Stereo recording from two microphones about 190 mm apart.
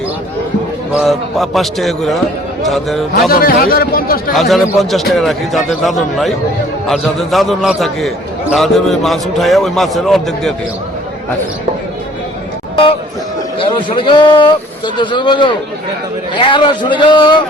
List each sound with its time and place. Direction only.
0.9 s a man's voice: centre (ahead or behind)
3.2 s speech: 50° left (ahead or behind)
4.4 s a man's voice: centre (ahead or behind)
12.7 s a man's voice: 30° left (ahead or behind)